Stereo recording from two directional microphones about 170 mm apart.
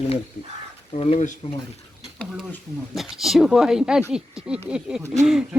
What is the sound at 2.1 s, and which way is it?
Speech, 5° right (ahead or behind).